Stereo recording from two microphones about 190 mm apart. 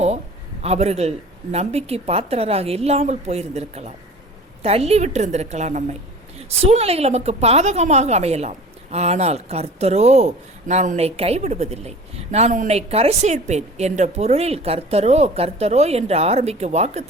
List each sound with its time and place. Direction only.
0.6 s a woman's voice: 35° right (ahead or behind)